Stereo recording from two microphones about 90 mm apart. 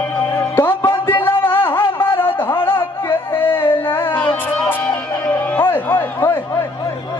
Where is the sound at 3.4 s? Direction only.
25° left (ahead or behind).